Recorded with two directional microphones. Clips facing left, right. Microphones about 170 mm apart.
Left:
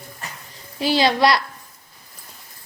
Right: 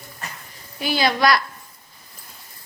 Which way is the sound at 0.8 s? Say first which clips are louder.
Left 3 dB; 30° left (ahead or behind).